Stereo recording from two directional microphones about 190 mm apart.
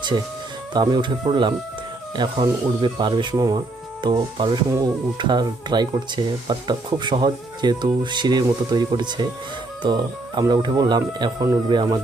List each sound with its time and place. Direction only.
0.7 s speech: 25° right (ahead or behind)